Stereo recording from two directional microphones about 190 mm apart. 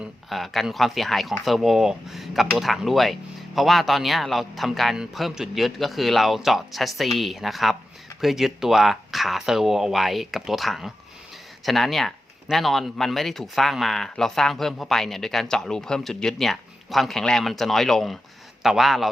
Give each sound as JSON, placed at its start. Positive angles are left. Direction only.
{"t": 0.0, "sound": "speech", "side_deg": 0}